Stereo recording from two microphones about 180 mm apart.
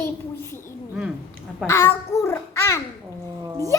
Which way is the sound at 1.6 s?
15° left (ahead or behind).